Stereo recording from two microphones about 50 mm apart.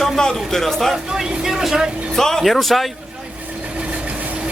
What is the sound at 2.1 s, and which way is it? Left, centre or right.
Speech, centre.